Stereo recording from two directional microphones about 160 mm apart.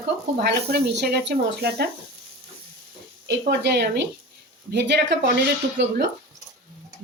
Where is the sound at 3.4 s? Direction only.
90° right.